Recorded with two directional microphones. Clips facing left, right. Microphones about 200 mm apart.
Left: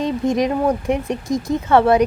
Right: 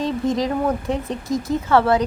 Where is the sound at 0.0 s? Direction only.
20° left (ahead or behind).